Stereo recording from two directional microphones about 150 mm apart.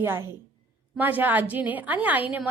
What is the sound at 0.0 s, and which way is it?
A woman's voice, 15° right (ahead or behind).